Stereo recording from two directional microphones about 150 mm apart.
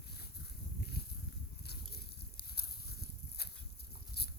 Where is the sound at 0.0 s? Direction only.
90° left.